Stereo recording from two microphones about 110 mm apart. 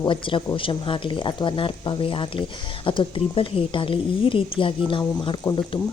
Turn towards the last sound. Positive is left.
turn(degrees=50)  # may be behind; listen again after turning